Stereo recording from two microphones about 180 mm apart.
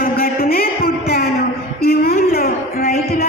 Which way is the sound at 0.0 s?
55° left (ahead or behind).